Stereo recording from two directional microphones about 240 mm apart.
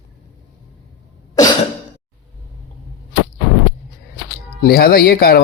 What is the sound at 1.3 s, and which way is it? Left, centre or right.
Cough, centre.